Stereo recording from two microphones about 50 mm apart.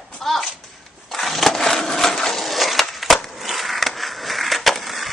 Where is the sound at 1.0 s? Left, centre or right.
Centre.